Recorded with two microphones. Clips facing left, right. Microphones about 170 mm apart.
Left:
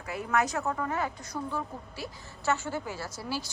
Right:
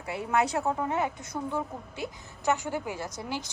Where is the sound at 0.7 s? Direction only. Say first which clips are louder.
Right 3 dB; 20° right (ahead or behind).